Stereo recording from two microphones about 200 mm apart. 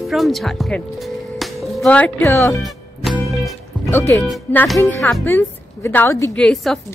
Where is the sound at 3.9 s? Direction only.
10° left (ahead or behind).